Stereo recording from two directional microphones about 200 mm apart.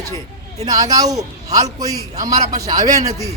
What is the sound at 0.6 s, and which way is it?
A man's voice, 20° right (ahead or behind).